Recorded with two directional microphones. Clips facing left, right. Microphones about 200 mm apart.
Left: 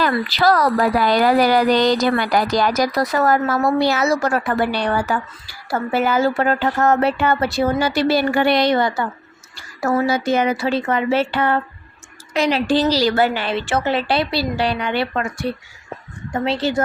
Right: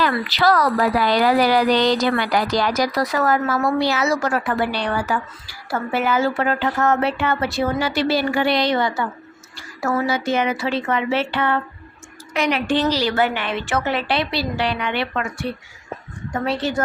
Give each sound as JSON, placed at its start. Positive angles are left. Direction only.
{"t": 0.1, "sound": "speech", "side_deg": 35}
{"t": 0.8, "sound": "a woman's voice", "side_deg": 50}
{"t": 16.3, "sound": "speech", "side_deg": 25}